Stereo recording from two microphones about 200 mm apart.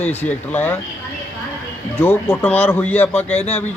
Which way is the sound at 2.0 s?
10° left (ahead or behind).